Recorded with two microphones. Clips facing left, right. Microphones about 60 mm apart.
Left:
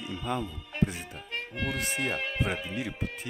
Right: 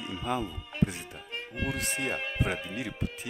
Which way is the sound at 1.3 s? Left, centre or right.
Left.